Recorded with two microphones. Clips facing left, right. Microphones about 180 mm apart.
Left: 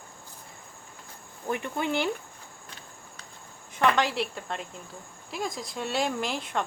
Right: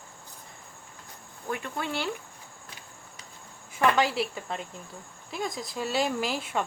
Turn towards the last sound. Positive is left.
turn(degrees=-5)  # may be behind; listen again after turning